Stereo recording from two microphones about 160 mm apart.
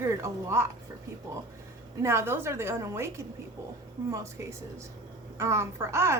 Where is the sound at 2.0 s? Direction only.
15° right (ahead or behind).